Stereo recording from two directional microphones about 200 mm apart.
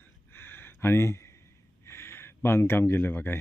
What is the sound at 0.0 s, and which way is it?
Gasp, 10° left (ahead or behind).